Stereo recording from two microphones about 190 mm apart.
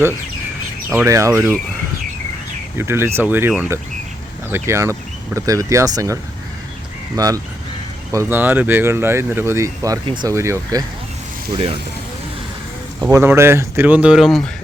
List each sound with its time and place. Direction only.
0.9 s speech: 10° right (ahead or behind)
2.7 s speech: 15° right (ahead or behind)
7.2 s speech: 20° right (ahead or behind)
11.5 s speech: 30° right (ahead or behind)
13.0 s speech: 15° right (ahead or behind)